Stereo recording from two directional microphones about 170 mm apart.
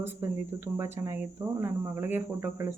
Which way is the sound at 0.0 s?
15° right (ahead or behind).